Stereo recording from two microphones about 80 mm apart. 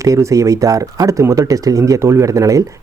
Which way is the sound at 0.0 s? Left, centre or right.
Right.